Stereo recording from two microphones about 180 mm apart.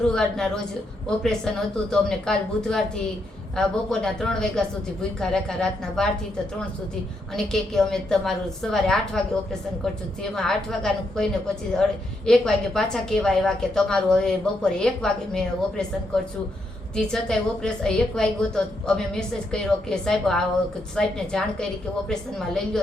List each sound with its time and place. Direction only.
0.0 s a woman's voice: 5° left (ahead or behind)
7.3 s a woman's voice: centre (ahead or behind)